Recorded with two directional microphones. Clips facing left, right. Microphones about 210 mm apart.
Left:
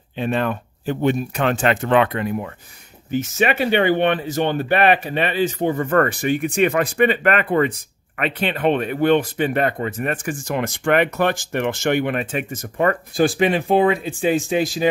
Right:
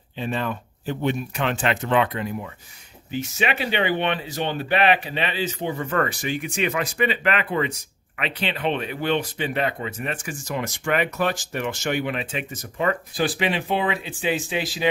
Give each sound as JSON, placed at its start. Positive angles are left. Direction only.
{"t": 0.2, "sound": "speech", "side_deg": 60}
{"t": 3.1, "sound": "speech", "side_deg": 50}